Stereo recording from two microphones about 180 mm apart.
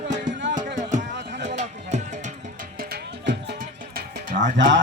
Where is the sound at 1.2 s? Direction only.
70° right (ahead or behind).